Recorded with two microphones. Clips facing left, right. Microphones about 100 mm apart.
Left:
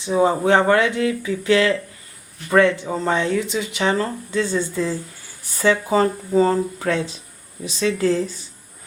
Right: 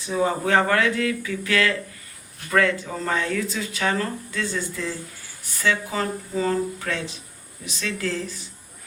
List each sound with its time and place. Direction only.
0.0 s speech: 25° left (ahead or behind)